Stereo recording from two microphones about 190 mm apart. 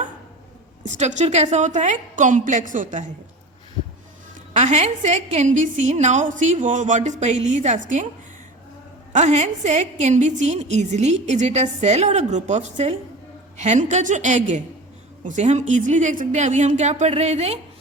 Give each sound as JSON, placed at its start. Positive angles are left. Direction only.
{"t": 0.9, "sound": "a woman's voice", "side_deg": -40}
{"t": 4.5, "sound": "a woman's voice", "side_deg": -40}
{"t": 9.1, "sound": "a woman's voice", "side_deg": -40}